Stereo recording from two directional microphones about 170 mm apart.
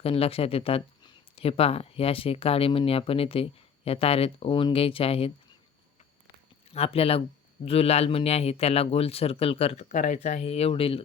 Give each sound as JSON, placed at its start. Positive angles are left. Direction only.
{"t": 0.0, "sound": "speech", "side_deg": 35}
{"t": 6.7, "sound": "speech", "side_deg": 35}